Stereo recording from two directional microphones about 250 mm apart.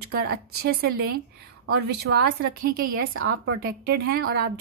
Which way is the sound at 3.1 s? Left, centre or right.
Right.